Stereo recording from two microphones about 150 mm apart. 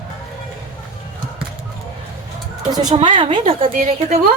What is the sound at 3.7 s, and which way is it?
Speech, 60° right (ahead or behind).